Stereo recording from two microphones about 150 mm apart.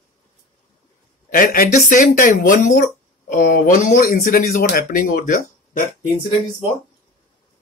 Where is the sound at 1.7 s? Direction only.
60° left (ahead or behind).